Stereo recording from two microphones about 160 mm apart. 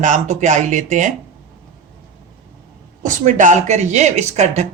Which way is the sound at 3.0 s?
50° right (ahead or behind).